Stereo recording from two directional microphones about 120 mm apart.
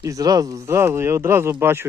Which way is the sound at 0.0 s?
30° right (ahead or behind).